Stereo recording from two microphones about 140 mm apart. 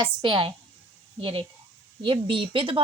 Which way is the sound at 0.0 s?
35° right (ahead or behind).